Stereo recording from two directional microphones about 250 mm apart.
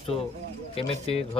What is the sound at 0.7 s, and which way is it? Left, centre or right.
Speech, left.